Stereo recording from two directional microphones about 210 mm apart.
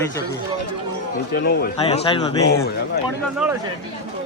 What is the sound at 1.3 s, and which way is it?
Speech, 50° left (ahead or behind).